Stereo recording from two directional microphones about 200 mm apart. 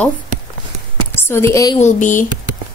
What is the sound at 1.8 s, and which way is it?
Speech, 40° left (ahead or behind).